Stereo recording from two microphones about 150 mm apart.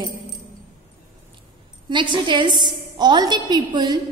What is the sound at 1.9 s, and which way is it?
A woman's voice, 30° right (ahead or behind).